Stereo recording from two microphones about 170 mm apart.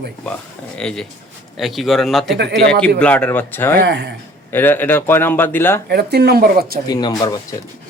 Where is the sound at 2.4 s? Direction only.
85° right.